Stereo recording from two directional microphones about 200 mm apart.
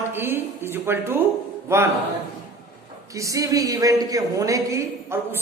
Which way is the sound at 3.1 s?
15° right (ahead or behind).